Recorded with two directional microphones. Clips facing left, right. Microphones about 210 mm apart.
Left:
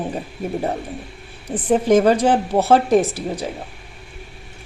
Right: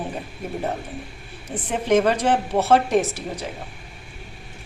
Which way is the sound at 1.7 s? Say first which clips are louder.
Left 5 dB; 35° left (ahead or behind).